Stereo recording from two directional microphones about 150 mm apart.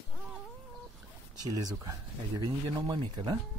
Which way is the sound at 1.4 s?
25° right (ahead or behind).